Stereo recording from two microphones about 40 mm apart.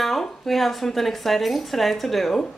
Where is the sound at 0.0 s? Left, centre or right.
Centre.